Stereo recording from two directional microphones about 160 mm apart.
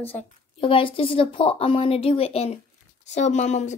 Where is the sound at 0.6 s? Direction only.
35° left (ahead or behind).